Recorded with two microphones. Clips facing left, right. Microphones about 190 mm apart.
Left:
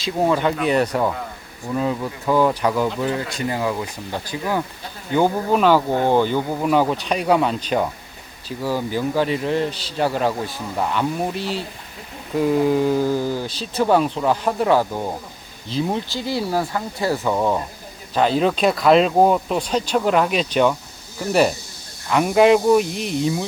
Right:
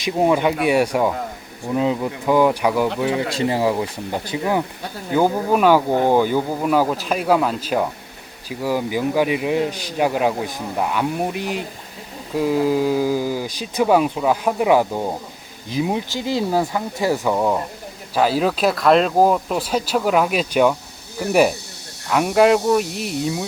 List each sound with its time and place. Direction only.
0.0 s speech: 15° right (ahead or behind)
3.2 s speech: 25° right (ahead or behind)
5.1 s speech: 5° right (ahead or behind)
12.3 s speech: 5° right (ahead or behind)
22.1 s speech: centre (ahead or behind)